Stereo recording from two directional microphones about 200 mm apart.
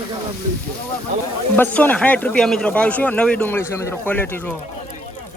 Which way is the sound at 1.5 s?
10° left (ahead or behind).